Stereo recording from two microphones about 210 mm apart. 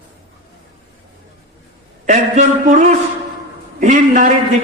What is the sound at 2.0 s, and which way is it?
Speech, 35° right (ahead or behind).